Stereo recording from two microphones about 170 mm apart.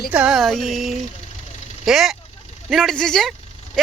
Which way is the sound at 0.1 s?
5° right (ahead or behind).